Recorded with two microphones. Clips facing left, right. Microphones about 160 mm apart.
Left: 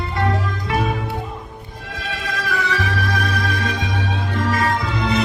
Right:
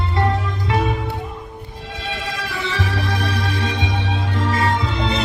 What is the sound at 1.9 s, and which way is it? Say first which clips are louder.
Music: even; 25° right (ahead or behind).